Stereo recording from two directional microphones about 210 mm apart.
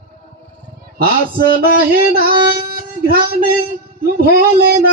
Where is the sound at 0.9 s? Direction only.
45° right (ahead or behind).